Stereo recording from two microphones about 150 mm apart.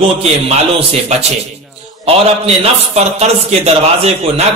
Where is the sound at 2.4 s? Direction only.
45° right (ahead or behind).